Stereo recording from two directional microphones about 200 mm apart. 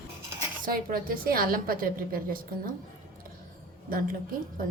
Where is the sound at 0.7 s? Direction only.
45° right (ahead or behind).